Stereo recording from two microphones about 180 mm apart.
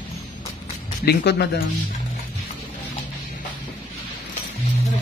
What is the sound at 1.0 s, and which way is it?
Speech, 65° left (ahead or behind).